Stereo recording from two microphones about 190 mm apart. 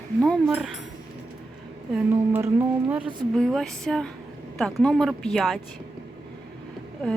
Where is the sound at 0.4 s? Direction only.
10° right (ahead or behind).